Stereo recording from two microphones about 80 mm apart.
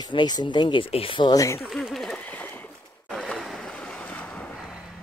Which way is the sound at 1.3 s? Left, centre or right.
Left.